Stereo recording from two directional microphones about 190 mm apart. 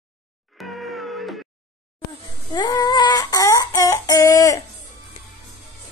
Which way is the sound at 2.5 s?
20° left (ahead or behind).